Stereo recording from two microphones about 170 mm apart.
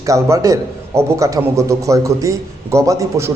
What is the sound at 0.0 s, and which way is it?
A man's voice, 20° right (ahead or behind).